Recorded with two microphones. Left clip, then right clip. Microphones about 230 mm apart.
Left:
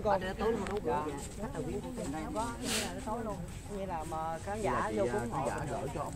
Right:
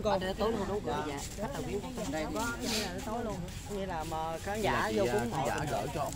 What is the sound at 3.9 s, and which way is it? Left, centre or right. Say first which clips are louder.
Speech: even; right.